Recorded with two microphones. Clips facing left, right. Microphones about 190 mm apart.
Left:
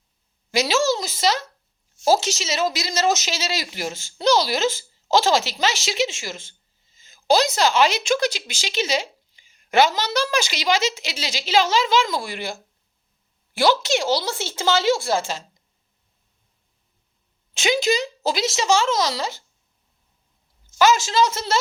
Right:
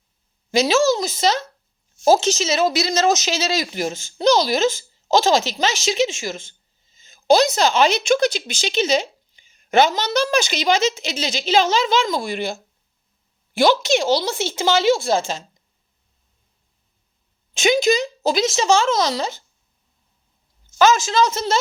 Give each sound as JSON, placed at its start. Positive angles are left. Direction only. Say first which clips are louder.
{"t": 1.0, "sound": "a woman's voice", "louder": "right 2 dB", "side_deg": -20}
{"t": 17.5, "sound": "a woman's voice", "louder": "right 4 dB", "side_deg": -15}
{"t": 20.9, "sound": "a woman's voice", "louder": "right 1 dB", "side_deg": -20}